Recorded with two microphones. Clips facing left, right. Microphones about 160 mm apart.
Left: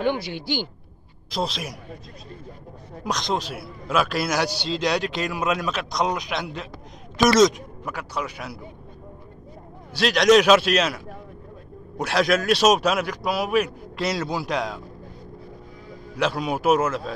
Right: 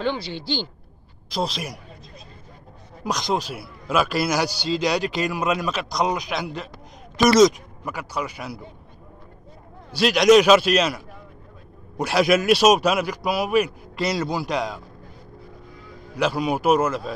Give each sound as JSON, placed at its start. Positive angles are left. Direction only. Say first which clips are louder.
{"t": 0.0, "sound": "speech", "louder": "left 2 dB", "side_deg": 15}
{"t": 1.3, "sound": "a man's voice", "louder": "right 1 dB", "side_deg": 0}
{"t": 3.0, "sound": "a man's voice", "louder": "right 1 dB", "side_deg": -5}
{"t": 9.9, "sound": "a man's voice", "louder": "right 2 dB", "side_deg": -5}
{"t": 12.0, "sound": "a man's voice", "louder": "right 2 dB", "side_deg": -5}
{"t": 16.2, "sound": "a man's voice", "louder": "right 2 dB", "side_deg": 0}